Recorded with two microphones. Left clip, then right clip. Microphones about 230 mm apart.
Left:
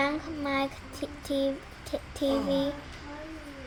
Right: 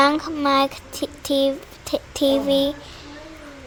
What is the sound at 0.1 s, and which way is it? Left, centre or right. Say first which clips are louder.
A child's voice: right 12 dB; right.